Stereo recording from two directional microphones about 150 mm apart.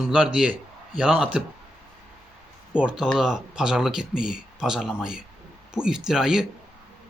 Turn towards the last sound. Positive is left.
turn(degrees=-5)  # may be behind; listen again after turning